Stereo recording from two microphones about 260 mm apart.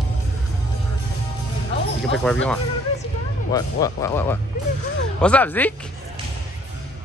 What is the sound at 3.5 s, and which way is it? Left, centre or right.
Speech, centre.